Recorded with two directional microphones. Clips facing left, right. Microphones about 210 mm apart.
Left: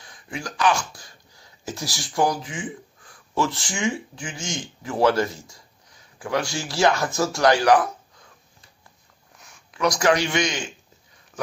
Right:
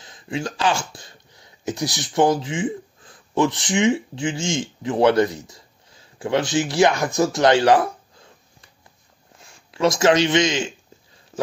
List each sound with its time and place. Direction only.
0.0 s speech: 25° right (ahead or behind)
9.4 s speech: 30° right (ahead or behind)